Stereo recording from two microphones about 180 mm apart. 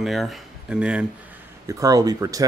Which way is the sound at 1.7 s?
20° right (ahead or behind).